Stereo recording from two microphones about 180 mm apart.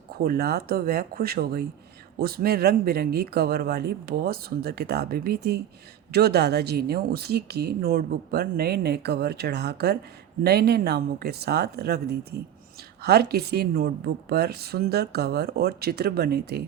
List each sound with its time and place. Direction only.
0.3 s a woman's voice: 60° right (ahead or behind)